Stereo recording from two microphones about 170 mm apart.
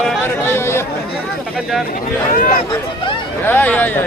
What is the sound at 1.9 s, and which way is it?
Speech, 55° left (ahead or behind).